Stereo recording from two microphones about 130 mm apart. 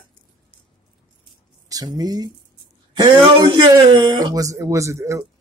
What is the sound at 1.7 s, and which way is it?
Speech, 30° right (ahead or behind).